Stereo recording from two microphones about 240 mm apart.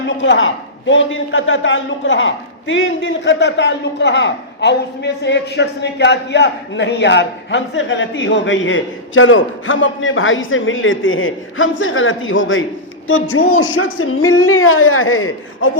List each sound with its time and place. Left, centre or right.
0.2 s a man's voice: left